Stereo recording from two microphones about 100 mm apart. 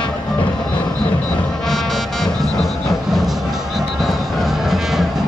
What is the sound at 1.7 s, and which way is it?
Music, centre (ahead or behind).